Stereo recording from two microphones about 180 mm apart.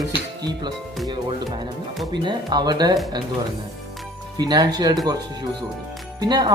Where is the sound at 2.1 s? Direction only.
25° right (ahead or behind).